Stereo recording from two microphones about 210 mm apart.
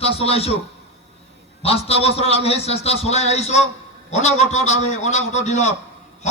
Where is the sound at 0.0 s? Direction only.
30° left (ahead or behind).